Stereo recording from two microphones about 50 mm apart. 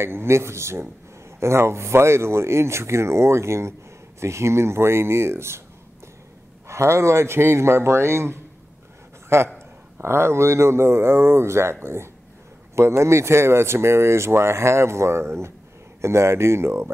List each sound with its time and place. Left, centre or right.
0.0 s speech: right
6.7 s speech: right